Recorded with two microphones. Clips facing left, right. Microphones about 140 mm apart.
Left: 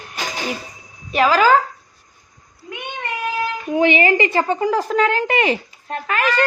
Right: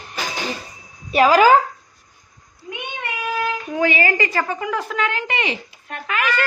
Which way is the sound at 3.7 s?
20° left (ahead or behind).